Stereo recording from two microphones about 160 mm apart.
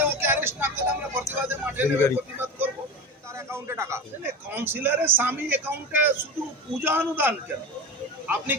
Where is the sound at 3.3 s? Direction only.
15° right (ahead or behind).